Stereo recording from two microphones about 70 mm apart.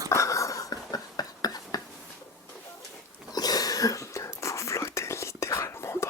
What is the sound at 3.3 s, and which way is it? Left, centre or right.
Whispering, left.